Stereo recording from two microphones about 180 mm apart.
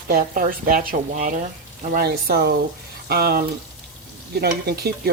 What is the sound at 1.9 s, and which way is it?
Stir, 60° right (ahead or behind).